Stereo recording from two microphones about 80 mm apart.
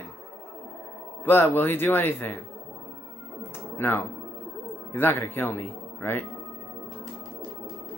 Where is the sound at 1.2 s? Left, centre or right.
Left.